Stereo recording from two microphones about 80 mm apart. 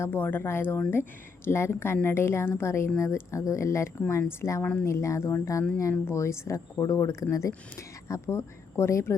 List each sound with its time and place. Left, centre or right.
0.0 s speech: left
4.6 s speech: left
4.9 s speech: left